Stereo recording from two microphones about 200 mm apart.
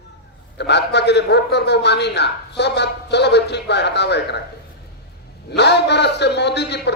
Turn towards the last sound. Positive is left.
turn(degrees=60)  # may be behind; listen again after turning